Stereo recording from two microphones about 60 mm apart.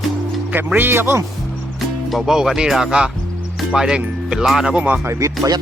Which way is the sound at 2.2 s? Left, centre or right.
Centre.